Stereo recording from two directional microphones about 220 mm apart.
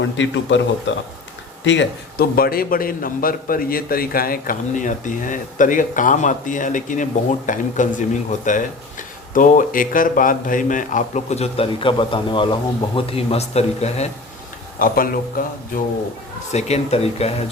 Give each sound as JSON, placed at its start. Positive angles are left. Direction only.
{"t": 0.0, "sound": "a man's voice", "side_deg": 55}
{"t": 14.8, "sound": "a man's voice", "side_deg": 40}
{"t": 16.5, "sound": "speech", "side_deg": 30}